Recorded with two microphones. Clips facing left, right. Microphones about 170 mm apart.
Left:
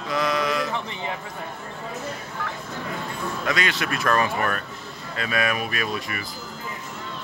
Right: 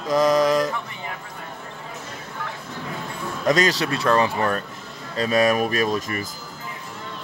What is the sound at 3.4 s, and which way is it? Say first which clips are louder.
Speech: right 7 dB; 40° right (ahead or behind).